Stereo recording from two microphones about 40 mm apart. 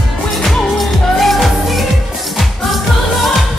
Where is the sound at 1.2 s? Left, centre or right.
Centre.